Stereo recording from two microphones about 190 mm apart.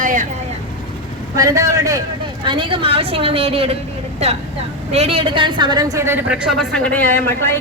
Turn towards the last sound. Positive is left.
turn(degrees=10)  # may be behind; listen again after turning